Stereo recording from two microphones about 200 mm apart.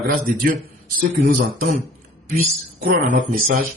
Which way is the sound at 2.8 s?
45° right (ahead or behind).